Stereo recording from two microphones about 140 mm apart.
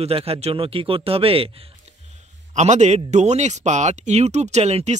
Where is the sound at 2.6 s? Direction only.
55° right (ahead or behind).